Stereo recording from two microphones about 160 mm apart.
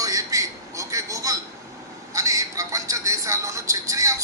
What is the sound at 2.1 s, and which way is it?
Vehicle, 20° right (ahead or behind).